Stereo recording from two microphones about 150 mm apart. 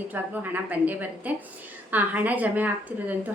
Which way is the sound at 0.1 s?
10° right (ahead or behind).